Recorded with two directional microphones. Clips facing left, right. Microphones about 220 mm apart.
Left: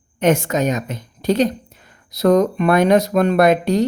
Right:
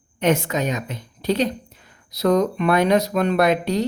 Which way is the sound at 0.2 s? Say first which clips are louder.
Left 4 dB; 45° left (ahead or behind).